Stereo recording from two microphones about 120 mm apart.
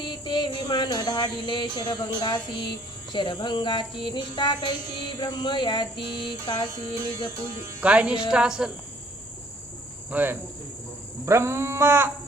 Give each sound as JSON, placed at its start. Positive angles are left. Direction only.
{"t": 0.0, "sound": "a sound", "side_deg": 40}
{"t": 2.2, "sound": "speech", "side_deg": 40}
{"t": 7.6, "sound": "speech", "side_deg": -15}
{"t": 10.1, "sound": "cricket", "side_deg": -15}
{"t": 11.3, "sound": "cat", "side_deg": -20}